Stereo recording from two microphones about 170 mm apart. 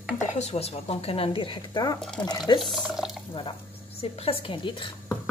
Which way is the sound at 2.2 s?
25° left (ahead or behind).